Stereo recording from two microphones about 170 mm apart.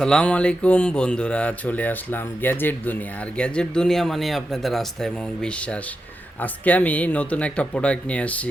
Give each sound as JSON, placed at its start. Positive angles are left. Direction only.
{"t": 0.0, "sound": "speech", "side_deg": 5}